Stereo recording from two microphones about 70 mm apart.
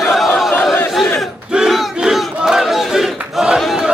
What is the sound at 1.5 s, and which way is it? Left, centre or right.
Battle cry, centre.